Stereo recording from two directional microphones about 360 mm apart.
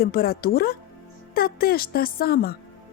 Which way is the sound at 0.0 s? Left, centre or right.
Left.